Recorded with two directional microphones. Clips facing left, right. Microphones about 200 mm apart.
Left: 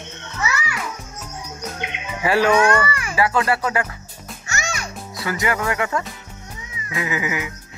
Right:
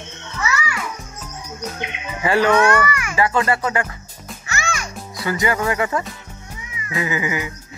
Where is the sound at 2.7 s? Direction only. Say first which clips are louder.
Right 1 dB; 30° left (ahead or behind).